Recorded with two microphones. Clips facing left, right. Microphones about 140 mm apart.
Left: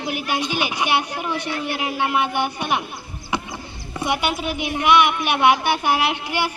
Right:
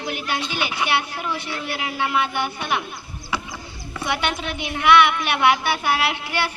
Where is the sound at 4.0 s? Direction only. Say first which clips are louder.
Left 2 dB; 15° left (ahead or behind).